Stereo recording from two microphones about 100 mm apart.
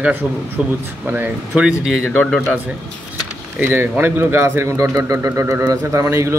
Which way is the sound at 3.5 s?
20° right (ahead or behind).